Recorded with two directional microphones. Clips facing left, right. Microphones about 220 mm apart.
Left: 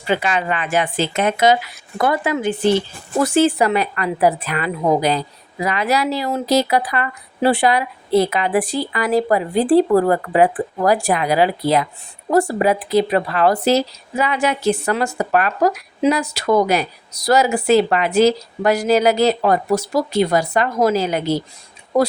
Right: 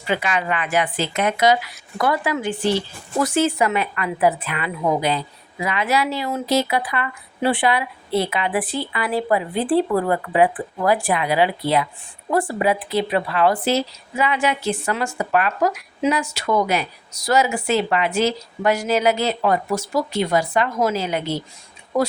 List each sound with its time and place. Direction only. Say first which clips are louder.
0.1 s a woman's voice: left 3 dB; 30° left (ahead or behind)